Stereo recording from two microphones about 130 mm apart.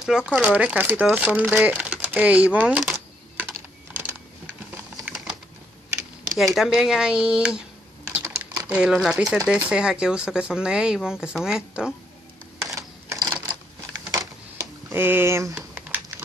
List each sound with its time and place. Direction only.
0.0 s speech: 5° right (ahead or behind)
1.1 s crumpling: 10° right (ahead or behind)
6.3 s speech: centre (ahead or behind)
8.1 s typing: 15° right (ahead or behind)
9.5 s speech: 5° right (ahead or behind)
12.6 s typewriter: 25° right (ahead or behind)
14.1 s a sound: 25° right (ahead or behind)